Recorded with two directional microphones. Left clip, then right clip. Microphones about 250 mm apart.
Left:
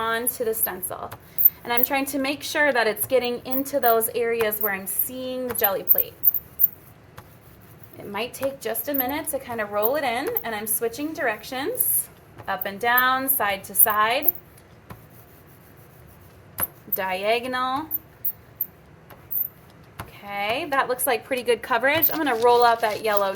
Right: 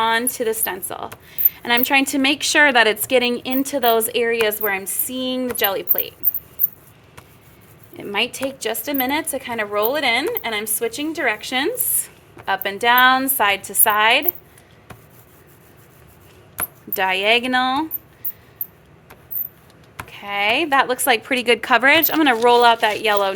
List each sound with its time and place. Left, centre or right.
0.0 s a woman's voice: right
8.1 s a woman's voice: right
16.9 s a woman's voice: right
20.1 s a woman's voice: right